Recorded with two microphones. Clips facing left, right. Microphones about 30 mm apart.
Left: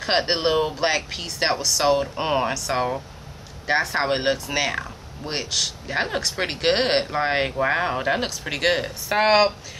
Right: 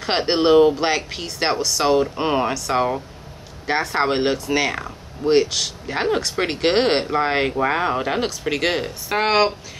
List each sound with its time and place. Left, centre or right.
0.0 s speech: centre